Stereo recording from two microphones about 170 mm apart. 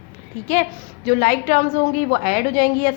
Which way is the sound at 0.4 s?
50° left (ahead or behind).